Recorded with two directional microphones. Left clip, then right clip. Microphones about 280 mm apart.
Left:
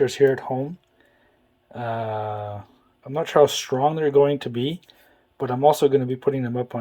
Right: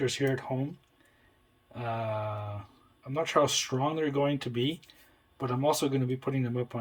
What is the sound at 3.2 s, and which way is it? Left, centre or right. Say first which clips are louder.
Speech: left 8 dB; centre.